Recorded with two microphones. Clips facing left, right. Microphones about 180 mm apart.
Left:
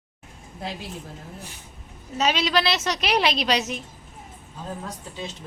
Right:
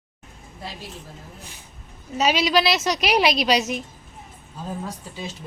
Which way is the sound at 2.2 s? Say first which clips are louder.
Right 3 dB; 10° right (ahead or behind).